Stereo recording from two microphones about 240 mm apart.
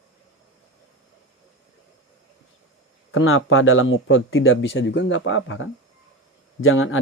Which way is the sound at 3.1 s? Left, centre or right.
Left.